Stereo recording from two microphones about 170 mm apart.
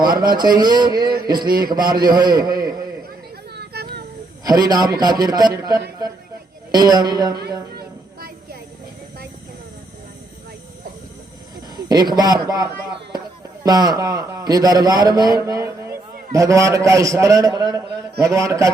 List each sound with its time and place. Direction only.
0.2 s a man's voice: 25° right (ahead or behind)
1.5 s a man's voice: 60° right (ahead or behind)
1.9 s a man's voice: 25° right (ahead or behind)
3.5 s a sound: 70° right (ahead or behind)
4.4 s a man's voice: 20° right (ahead or behind)
11.9 s a man's voice: 25° right (ahead or behind)
13.7 s a man's voice: 25° right (ahead or behind)